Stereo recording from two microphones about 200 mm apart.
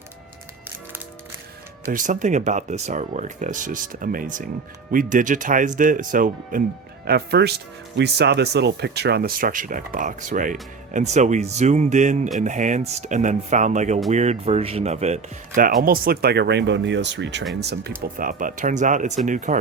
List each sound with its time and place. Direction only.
1.9 s speech: 40° right (ahead or behind)